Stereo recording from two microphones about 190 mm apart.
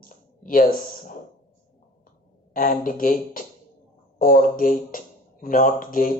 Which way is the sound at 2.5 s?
45° left (ahead or behind).